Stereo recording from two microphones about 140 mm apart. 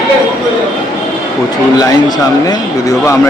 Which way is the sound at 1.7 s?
25° left (ahead or behind).